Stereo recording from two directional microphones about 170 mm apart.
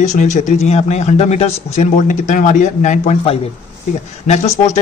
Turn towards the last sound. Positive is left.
turn(degrees=40)  # may be behind; listen again after turning